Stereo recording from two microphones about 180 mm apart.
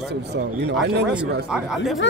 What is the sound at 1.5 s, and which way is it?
Speech, centre (ahead or behind).